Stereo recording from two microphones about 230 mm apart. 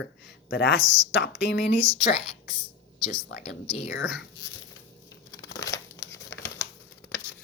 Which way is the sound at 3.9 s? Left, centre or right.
Left.